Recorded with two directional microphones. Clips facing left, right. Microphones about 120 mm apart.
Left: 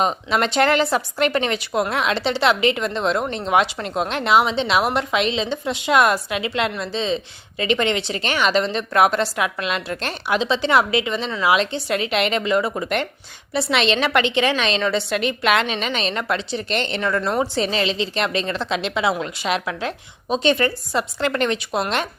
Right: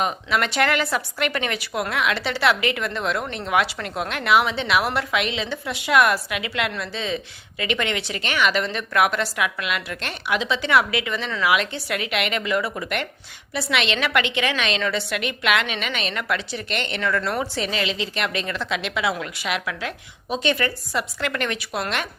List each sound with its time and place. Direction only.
0.0 s a woman's voice: 30° left (ahead or behind)